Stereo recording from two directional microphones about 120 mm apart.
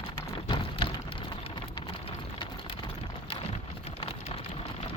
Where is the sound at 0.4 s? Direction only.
45° left (ahead or behind).